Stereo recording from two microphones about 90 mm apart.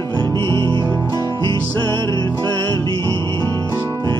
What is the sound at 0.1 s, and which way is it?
Music, 60° right (ahead or behind).